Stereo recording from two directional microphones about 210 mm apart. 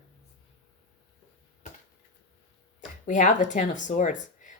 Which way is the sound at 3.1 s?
35° left (ahead or behind).